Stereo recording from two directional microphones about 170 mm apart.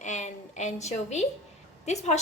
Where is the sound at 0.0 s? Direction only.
45° left (ahead or behind).